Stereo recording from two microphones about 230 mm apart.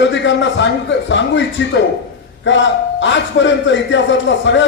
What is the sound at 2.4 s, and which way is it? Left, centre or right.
A man's voice, left.